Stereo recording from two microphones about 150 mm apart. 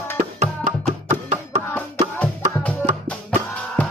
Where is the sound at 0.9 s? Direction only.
45° right (ahead or behind).